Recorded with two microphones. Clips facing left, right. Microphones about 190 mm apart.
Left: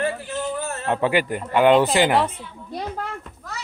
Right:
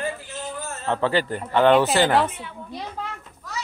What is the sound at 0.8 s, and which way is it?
Speech, 15° left (ahead or behind).